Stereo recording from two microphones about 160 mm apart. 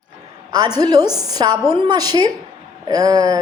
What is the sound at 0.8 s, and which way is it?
A woman's voice, 25° right (ahead or behind).